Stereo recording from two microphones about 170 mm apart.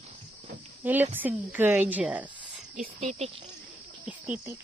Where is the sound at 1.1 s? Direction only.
10° right (ahead or behind).